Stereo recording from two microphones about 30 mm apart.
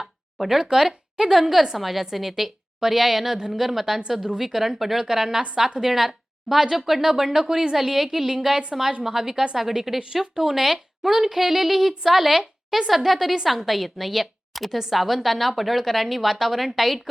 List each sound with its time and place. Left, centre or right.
0.0 s a sound: centre
0.6 s a woman's voice: centre
1.2 s a woman's voice: centre
7.8 s a woman's voice: centre